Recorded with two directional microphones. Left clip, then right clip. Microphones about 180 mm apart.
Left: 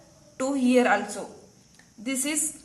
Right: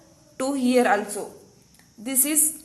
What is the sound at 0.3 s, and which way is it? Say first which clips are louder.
Speech: right 1 dB; 20° right (ahead or behind).